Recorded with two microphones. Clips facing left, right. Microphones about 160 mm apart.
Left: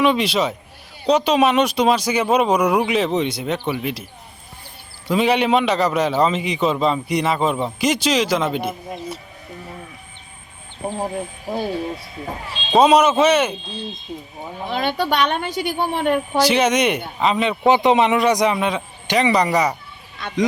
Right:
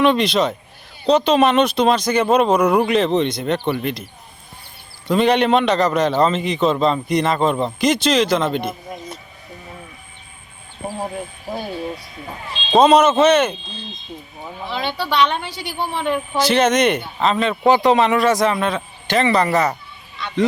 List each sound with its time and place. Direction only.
0.0 s a man's voice: 10° left (ahead or behind)
5.0 s a man's voice: 5° left (ahead or behind)
12.7 s a man's voice: 10° left (ahead or behind)
14.7 s a woman's voice: 50° left (ahead or behind)
16.4 s a man's voice: 10° left (ahead or behind)
20.2 s a sound: 50° left (ahead or behind)